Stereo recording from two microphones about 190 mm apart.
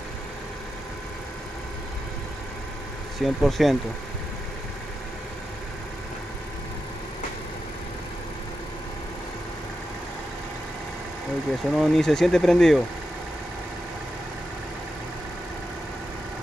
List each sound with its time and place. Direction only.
3.2 s speech: centre (ahead or behind)
11.7 s speech: centre (ahead or behind)